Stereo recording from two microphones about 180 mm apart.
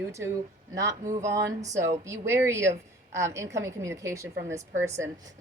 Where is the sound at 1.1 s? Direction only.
15° right (ahead or behind).